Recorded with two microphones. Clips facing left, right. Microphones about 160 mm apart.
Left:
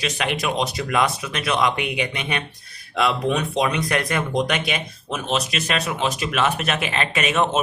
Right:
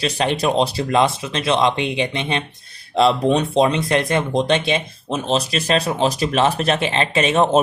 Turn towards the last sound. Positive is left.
turn(degrees=-30)  # may be behind; listen again after turning